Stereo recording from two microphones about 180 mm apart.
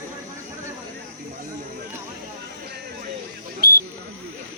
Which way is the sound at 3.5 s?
55° right (ahead or behind).